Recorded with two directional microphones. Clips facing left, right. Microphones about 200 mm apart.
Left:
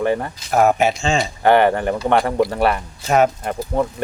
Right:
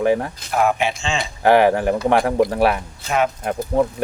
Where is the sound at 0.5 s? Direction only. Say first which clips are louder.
Left 4 dB; 45° left (ahead or behind).